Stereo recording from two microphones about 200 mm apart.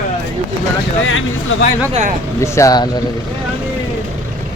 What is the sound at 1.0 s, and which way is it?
Speech, 75° left (ahead or behind).